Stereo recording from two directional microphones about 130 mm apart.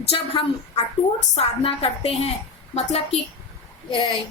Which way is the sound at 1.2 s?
50° left (ahead or behind).